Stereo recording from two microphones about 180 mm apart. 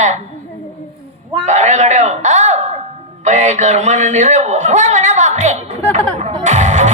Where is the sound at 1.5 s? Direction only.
40° right (ahead or behind).